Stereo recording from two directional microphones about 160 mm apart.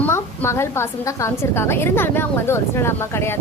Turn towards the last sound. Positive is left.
turn(degrees=15)  # may be behind; listen again after turning